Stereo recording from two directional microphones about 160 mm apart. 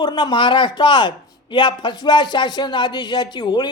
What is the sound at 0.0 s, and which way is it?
A woman's voice, 25° left (ahead or behind).